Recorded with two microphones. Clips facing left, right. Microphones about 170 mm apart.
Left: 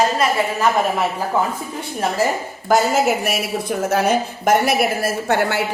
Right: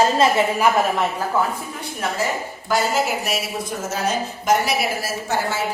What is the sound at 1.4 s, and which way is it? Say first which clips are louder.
Speech: left 1 dB; 20° left (ahead or behind).